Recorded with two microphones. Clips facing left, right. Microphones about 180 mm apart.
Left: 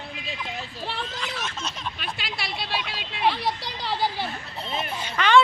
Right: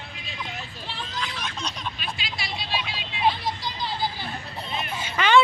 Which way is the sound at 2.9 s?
65° left (ahead or behind).